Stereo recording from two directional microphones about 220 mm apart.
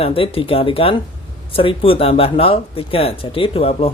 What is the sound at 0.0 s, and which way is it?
Speech, 25° left (ahead or behind).